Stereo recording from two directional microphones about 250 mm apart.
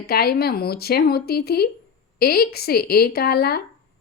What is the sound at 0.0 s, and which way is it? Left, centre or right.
A woman's voice, left.